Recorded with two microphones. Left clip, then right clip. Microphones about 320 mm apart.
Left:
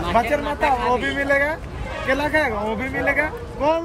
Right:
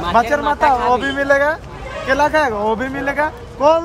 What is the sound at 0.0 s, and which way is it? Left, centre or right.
Speech, centre.